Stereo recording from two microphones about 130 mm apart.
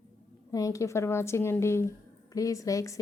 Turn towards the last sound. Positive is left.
turn(degrees=25)  # may be behind; listen again after turning